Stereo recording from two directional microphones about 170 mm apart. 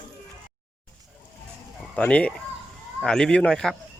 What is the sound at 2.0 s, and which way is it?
Speech, 5° left (ahead or behind).